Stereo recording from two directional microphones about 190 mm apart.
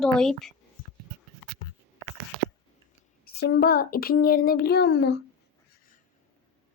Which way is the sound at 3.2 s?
55° left (ahead or behind).